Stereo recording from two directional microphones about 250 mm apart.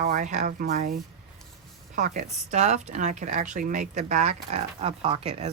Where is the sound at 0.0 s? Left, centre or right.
Right.